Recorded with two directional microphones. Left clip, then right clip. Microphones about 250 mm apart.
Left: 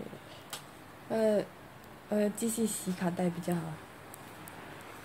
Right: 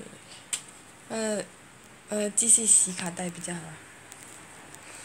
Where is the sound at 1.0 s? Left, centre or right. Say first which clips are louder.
Left 2 dB; centre; by 3.6 s left.